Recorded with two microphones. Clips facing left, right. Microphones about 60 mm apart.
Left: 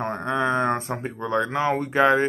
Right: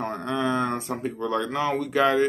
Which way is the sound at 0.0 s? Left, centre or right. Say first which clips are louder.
Left 2 dB; left.